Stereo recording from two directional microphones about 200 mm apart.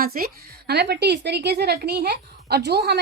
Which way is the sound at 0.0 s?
45° right (ahead or behind).